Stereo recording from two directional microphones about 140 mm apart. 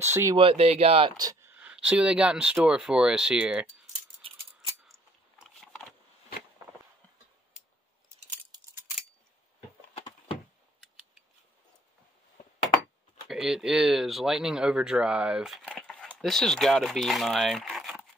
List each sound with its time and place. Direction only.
0.0 s speech: 20° right (ahead or behind)
0.4 s speech: 45° right (ahead or behind)
1.1 s speech: 25° right (ahead or behind)
1.5 s speech: 10° right (ahead or behind)
5.4 s vehicle: centre (ahead or behind)
13.3 s speech: 5° right (ahead or behind)
15.7 s a sound: 5° left (ahead or behind)
16.2 s speech: centre (ahead or behind)